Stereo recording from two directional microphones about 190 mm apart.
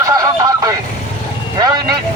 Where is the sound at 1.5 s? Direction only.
20° right (ahead or behind).